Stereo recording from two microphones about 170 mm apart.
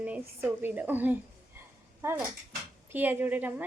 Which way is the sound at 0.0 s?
10° right (ahead or behind).